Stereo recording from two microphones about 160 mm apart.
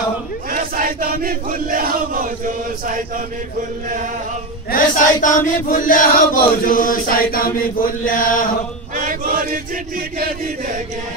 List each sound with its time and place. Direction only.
0.5 s chant: 55° right (ahead or behind)
4.6 s chant: 55° left (ahead or behind)
8.9 s chant: 60° right (ahead or behind)